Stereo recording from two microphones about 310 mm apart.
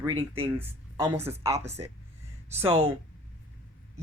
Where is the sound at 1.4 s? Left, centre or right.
Centre.